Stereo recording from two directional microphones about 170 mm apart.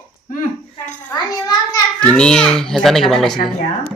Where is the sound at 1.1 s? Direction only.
20° left (ahead or behind).